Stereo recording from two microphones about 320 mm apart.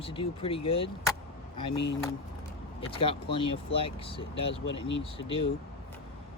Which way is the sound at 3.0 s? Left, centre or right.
Centre.